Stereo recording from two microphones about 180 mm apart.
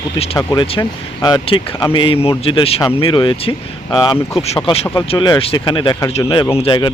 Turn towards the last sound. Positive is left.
turn(degrees=25)  # may be behind; listen again after turning